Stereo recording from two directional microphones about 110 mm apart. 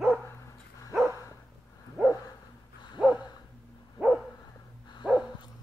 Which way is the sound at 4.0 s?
10° right (ahead or behind).